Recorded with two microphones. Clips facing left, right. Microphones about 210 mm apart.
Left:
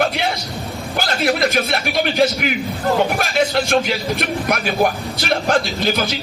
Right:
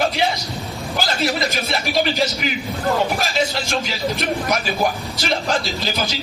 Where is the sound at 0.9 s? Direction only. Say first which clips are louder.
Left 3 dB; 55° left (ahead or behind).